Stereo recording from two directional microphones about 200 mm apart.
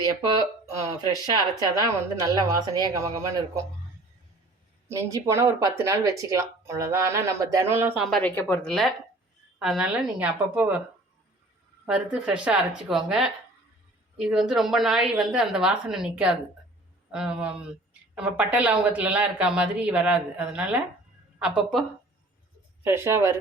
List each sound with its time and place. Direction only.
0.8 s speech: 20° right (ahead or behind)
4.9 s speech: 15° right (ahead or behind)
8.2 s a woman's voice: 10° left (ahead or behind); by 10.8 s 5° right (ahead or behind)
11.9 s a woman's voice: 5° right (ahead or behind)
22.8 s speech: 10° right (ahead or behind)